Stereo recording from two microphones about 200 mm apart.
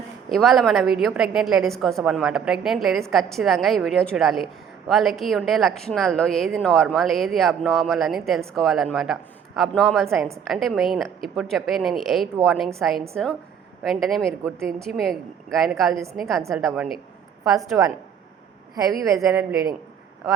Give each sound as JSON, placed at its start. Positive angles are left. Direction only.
{"t": 0.3, "sound": "a woman's voice", "side_deg": 0}
{"t": 19.0, "sound": "speech", "side_deg": -15}